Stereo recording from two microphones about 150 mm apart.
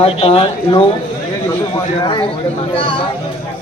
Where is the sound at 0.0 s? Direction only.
40° left (ahead or behind).